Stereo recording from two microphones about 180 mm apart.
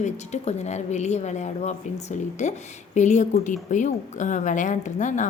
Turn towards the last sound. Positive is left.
turn(degrees=45)  # may be behind; listen again after turning